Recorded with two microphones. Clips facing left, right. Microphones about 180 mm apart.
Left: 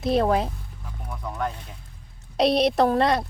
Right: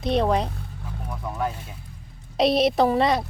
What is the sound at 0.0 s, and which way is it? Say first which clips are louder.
Speech: left 1 dB; centre (ahead or behind).